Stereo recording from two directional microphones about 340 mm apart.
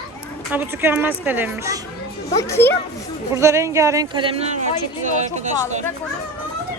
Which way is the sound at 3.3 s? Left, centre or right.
Centre.